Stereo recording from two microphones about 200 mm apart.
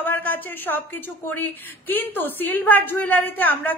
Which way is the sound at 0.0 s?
10° left (ahead or behind).